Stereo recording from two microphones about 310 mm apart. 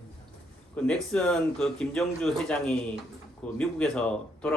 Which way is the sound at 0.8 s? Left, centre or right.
Centre.